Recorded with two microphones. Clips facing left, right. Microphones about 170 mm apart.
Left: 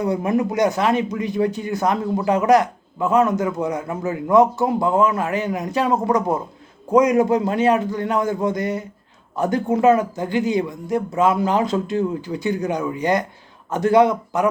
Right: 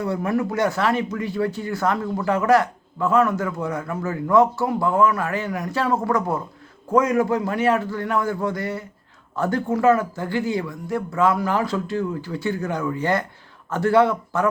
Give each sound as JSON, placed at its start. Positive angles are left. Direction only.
{"t": 0.0, "sound": "a man's voice", "side_deg": 20}